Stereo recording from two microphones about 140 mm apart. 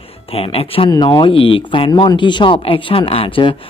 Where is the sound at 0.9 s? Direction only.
30° left (ahead or behind).